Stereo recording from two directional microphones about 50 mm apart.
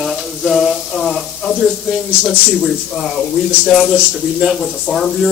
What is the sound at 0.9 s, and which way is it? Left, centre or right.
Speech, centre.